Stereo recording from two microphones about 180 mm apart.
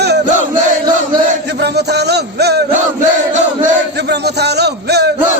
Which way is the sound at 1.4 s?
65° right (ahead or behind).